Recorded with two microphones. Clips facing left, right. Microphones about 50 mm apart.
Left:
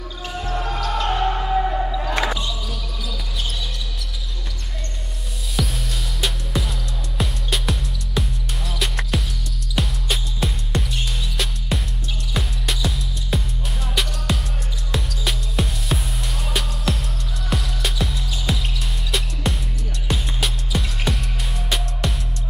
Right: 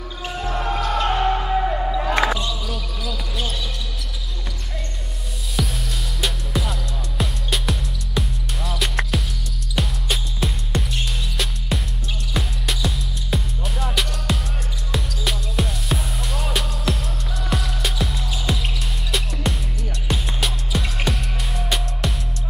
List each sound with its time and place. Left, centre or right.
0.4 s music: centre
1.9 s music: right
5.6 s music: centre